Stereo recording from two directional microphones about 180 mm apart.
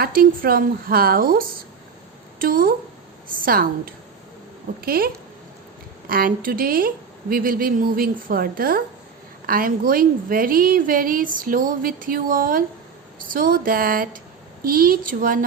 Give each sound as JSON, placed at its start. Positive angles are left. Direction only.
{"t": 0.0, "sound": "a woman's voice", "side_deg": -55}